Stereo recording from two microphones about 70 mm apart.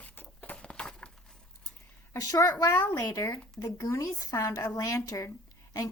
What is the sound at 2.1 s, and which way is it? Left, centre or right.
Speech, left.